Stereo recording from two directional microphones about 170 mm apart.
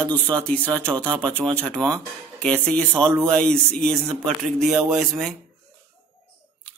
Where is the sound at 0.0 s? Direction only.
5° left (ahead or behind).